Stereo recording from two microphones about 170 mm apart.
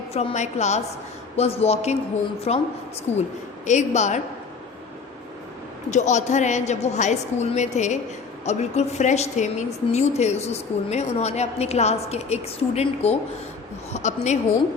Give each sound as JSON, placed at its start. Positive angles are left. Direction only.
{"t": 0.1, "sound": "a woman's voice", "side_deg": 40}
{"t": 5.9, "sound": "a woman's voice", "side_deg": 45}